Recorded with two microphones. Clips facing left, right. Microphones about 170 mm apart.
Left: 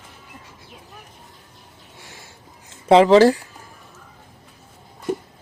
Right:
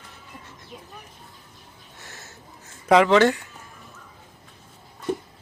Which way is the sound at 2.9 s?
35° left (ahead or behind).